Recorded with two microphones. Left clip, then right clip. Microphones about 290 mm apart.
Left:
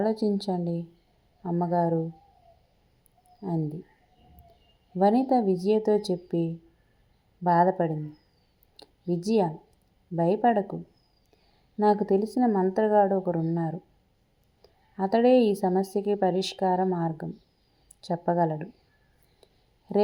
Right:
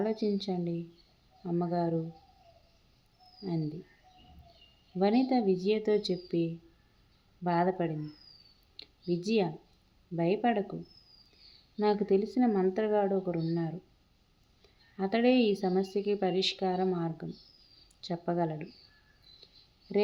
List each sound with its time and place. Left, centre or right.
0.0 s speech: centre
4.9 s speech: centre
8.7 s a sound: centre
10.2 s speech: centre
11.8 s speech: centre
14.9 s speech: centre
19.4 s a sound: centre